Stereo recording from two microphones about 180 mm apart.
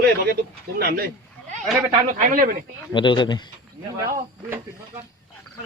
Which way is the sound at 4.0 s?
20° right (ahead or behind).